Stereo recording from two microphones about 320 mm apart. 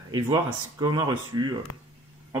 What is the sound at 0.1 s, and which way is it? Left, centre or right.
Speech, centre.